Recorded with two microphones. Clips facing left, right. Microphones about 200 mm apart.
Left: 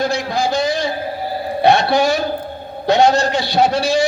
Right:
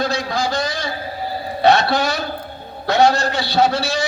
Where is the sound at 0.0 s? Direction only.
15° left (ahead or behind).